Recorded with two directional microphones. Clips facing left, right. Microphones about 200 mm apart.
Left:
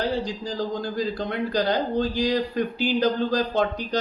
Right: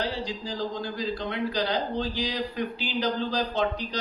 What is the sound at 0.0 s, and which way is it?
A man's voice, 45° left (ahead or behind).